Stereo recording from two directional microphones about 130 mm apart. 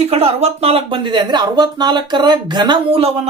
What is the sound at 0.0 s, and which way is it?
Speech, 50° right (ahead or behind).